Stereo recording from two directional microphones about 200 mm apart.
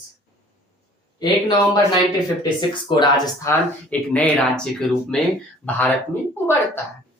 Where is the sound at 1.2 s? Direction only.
20° left (ahead or behind).